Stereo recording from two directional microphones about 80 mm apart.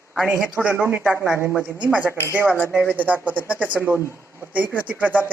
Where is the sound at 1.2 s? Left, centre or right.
Centre.